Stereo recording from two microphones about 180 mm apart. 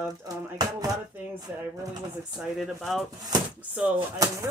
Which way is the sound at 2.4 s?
Centre (ahead or behind).